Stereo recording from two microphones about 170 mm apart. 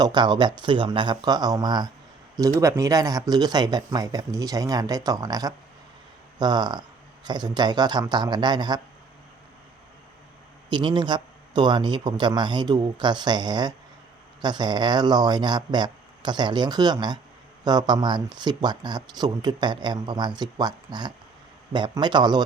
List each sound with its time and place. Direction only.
0.0 s speech: 25° right (ahead or behind)
10.7 s speech: 25° right (ahead or behind)